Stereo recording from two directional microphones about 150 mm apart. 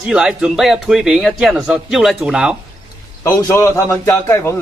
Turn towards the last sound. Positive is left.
turn(degrees=20)  # may be behind; listen again after turning